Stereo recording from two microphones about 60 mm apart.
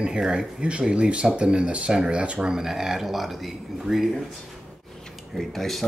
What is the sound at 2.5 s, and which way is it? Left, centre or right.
Speech, centre.